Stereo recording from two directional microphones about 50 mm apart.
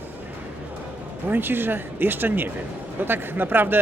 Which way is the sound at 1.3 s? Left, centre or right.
Right.